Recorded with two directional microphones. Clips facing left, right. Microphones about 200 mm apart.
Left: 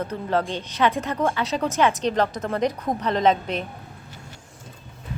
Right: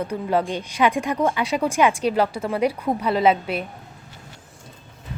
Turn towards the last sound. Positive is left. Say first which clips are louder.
# right 2 dB
turn(degrees=-10)  # may be behind; listen again after turning